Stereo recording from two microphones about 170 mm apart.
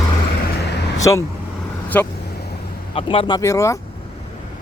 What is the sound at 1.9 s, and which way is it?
Speech, 10° left (ahead or behind).